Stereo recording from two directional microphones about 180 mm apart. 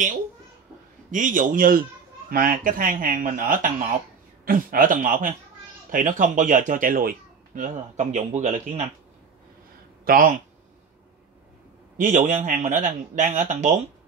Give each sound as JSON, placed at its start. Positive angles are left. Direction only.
{"t": 1.1, "sound": "speech", "side_deg": -45}
{"t": 10.0, "sound": "speech", "side_deg": -50}
{"t": 12.0, "sound": "speech", "side_deg": -45}